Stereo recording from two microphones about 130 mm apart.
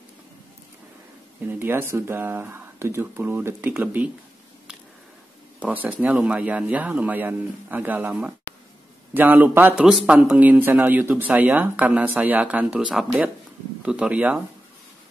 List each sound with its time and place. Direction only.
1.5 s speech: 15° right (ahead or behind)
5.6 s speech: 10° right (ahead or behind)
9.8 s speech: 5° right (ahead or behind)